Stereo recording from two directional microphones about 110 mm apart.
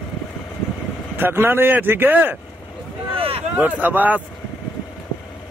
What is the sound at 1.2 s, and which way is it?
Speech, 20° right (ahead or behind).